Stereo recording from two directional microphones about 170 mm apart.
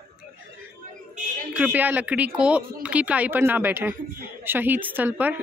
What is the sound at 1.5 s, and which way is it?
Speech, 10° right (ahead or behind).